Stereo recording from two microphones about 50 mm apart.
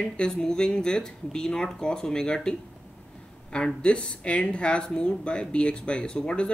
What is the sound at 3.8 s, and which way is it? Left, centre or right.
Speech, centre.